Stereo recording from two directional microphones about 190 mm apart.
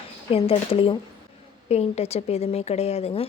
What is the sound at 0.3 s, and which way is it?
A woman's voice, 30° left (ahead or behind).